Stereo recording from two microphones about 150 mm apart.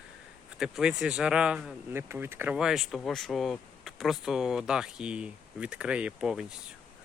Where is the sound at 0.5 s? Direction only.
5° right (ahead or behind).